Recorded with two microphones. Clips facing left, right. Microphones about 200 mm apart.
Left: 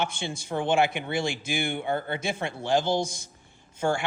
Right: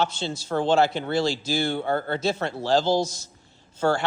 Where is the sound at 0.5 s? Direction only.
60° right (ahead or behind).